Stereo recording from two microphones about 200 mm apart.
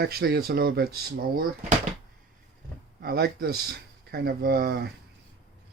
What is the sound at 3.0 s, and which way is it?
Speech, 50° right (ahead or behind).